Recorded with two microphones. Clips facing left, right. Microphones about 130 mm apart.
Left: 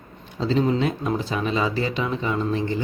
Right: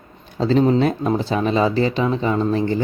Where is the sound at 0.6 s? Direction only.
40° right (ahead or behind).